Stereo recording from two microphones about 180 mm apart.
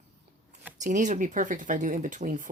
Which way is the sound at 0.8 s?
45° right (ahead or behind).